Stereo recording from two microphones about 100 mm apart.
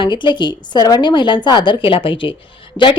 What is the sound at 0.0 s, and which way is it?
A woman's voice, 50° left (ahead or behind).